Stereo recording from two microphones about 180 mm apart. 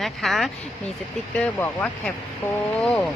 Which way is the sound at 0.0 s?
Centre (ahead or behind).